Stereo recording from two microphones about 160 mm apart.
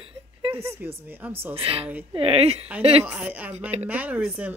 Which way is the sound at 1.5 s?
35° right (ahead or behind).